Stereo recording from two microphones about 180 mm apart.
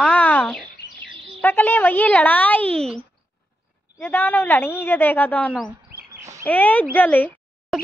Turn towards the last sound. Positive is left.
turn(degrees=10)  # may be behind; listen again after turning